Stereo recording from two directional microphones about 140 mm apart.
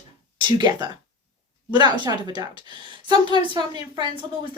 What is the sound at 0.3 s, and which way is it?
A woman's voice, 35° right (ahead or behind).